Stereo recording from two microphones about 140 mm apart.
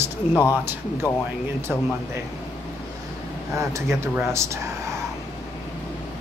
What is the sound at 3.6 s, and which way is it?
Speech, 20° right (ahead or behind).